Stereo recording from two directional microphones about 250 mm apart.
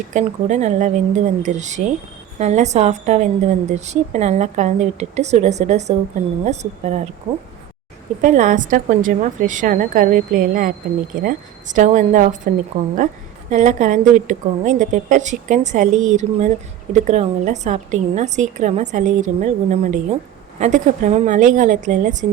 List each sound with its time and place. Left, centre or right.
0.1 s a woman's voice: right
8.2 s a woman's voice: right
13.5 s a woman's voice: right